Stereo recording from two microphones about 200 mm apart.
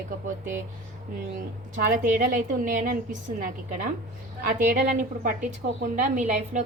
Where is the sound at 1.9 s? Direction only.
40° right (ahead or behind).